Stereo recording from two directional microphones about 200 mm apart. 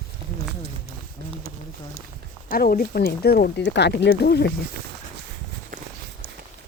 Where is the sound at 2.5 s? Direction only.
45° left (ahead or behind).